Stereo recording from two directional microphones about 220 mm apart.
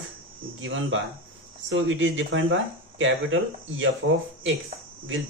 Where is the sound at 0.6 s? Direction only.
60° right (ahead or behind).